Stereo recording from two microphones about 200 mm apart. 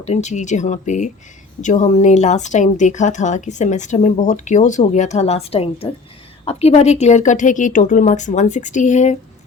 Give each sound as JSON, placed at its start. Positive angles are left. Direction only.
{"t": 0.0, "sound": "speech", "side_deg": 35}